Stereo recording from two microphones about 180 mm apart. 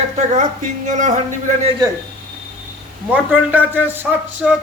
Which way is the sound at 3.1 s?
10° right (ahead or behind).